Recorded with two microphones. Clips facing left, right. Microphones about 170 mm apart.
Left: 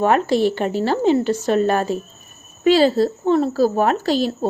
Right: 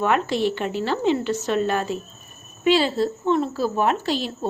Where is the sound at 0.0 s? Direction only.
40° left (ahead or behind).